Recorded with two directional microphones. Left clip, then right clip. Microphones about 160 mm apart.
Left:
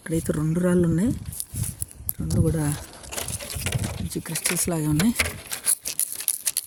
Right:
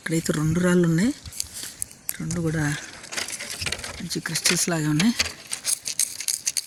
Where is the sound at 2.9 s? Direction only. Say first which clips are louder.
Right 3 dB; 75° left (ahead or behind).